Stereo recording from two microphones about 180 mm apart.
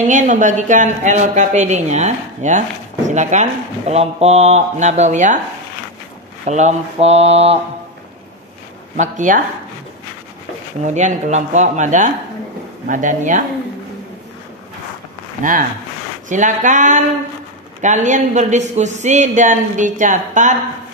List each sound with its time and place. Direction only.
0.0 s speech: 45° right (ahead or behind)
6.4 s speech: 40° right (ahead or behind)
8.9 s speech: 45° right (ahead or behind)
10.8 s speech: 40° right (ahead or behind)
16.3 s speech: 45° right (ahead or behind)